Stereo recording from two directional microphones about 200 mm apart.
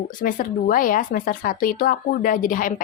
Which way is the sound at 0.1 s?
40° left (ahead or behind).